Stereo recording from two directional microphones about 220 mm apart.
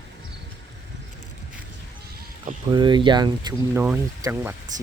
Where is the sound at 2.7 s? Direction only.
20° right (ahead or behind).